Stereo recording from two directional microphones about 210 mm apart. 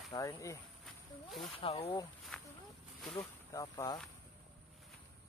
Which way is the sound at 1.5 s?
30° left (ahead or behind).